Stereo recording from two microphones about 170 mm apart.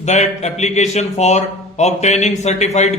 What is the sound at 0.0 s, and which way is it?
A man's voice, 40° left (ahead or behind).